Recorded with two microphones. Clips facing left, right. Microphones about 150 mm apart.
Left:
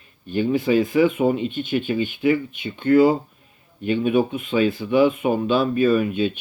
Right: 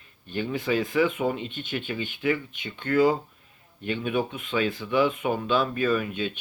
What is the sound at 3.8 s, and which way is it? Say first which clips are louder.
Speech: left 8 dB; 15° left (ahead or behind).